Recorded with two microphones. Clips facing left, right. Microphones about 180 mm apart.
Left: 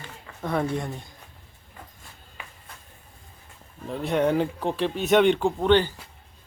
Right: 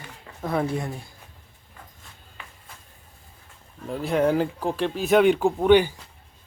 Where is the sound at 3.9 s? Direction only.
Centre (ahead or behind).